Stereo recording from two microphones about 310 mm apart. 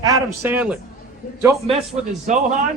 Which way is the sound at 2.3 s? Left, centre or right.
Right.